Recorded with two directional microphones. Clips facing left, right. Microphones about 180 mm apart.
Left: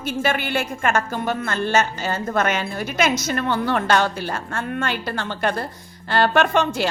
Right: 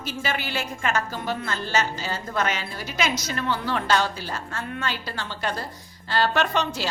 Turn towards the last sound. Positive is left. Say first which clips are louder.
# left 5 dB
turn(degrees=55)  # may be behind; listen again after turning